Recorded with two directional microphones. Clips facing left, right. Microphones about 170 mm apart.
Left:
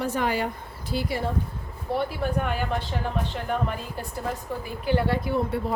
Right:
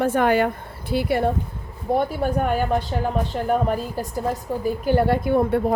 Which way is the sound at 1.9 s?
45° right (ahead or behind).